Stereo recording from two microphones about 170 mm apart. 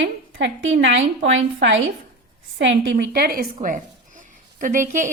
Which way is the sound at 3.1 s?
60° right (ahead or behind).